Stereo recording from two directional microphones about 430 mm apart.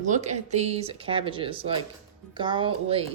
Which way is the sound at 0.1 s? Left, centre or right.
Centre.